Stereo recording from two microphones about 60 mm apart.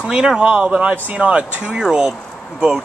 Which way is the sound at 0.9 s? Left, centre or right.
Right.